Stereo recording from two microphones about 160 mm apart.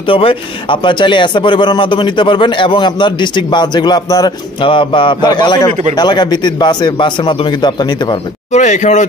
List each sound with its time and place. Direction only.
0.0 s a man's voice: 35° left (ahead or behind)
8.5 s speech: 50° left (ahead or behind)